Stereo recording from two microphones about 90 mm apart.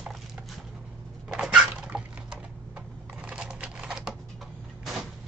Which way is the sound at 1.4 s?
10° right (ahead or behind).